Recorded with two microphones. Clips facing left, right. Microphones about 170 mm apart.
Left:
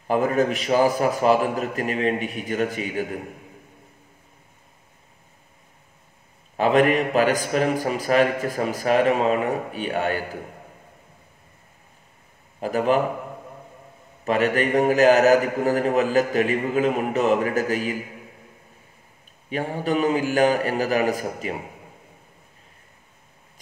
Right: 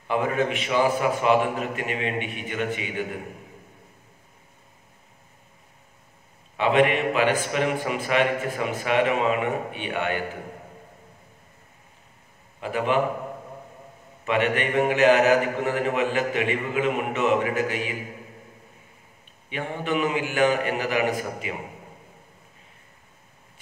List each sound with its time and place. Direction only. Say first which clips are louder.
0.0 s a man's voice: left 3 dB; 40° left (ahead or behind)
6.5 s a man's voice: left 2 dB; 40° left (ahead or behind)
12.5 s a man's voice: left 3 dB; 40° left (ahead or behind)
14.2 s a man's voice: left 3 dB; 40° left (ahead or behind)
19.5 s a man's voice: left 3 dB; 40° left (ahead or behind)